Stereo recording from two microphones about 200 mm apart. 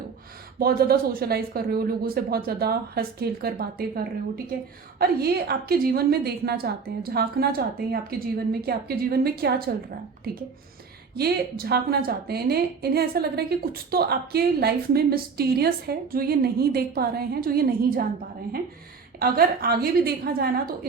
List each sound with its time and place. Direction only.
0.6 s a woman's voice: 50° right (ahead or behind)
11.1 s a woman's voice: 50° right (ahead or behind)
19.2 s a woman's voice: 50° right (ahead or behind)